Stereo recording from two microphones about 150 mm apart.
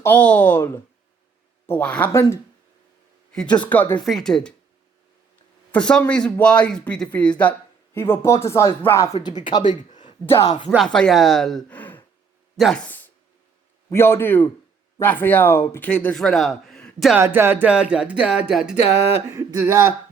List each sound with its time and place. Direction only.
0.0 s a man's voice: 10° left (ahead or behind)
5.7 s a man's voice: 5° left (ahead or behind)
9.6 s a sound: 55° left (ahead or behind)
10.8 s a man's voice: 5° left (ahead or behind)
17.2 s speech: 15° right (ahead or behind)
19.3 s speech: 20° right (ahead or behind)